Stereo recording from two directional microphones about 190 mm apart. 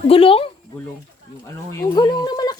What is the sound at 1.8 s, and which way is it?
Speech, 20° left (ahead or behind).